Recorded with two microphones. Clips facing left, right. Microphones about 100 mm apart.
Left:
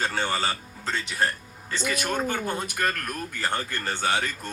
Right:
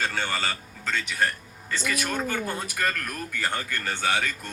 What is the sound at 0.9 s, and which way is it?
Speech, 30° left (ahead or behind).